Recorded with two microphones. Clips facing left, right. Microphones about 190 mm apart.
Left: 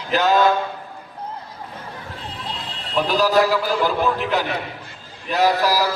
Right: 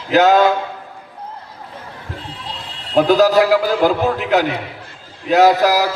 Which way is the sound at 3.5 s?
75° right (ahead or behind).